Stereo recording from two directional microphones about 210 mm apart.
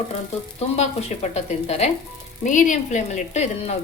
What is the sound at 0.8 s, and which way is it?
Speech, 30° left (ahead or behind).